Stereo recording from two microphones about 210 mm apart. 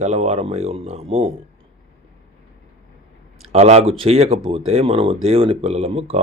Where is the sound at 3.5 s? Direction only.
30° right (ahead or behind).